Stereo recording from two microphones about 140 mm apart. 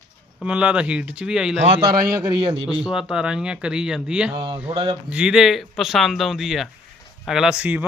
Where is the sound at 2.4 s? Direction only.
40° right (ahead or behind).